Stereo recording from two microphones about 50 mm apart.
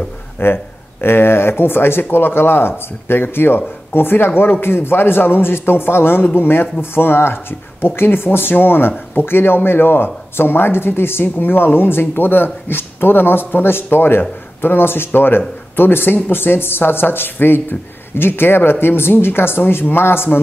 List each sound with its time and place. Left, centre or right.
0.4 s speech: left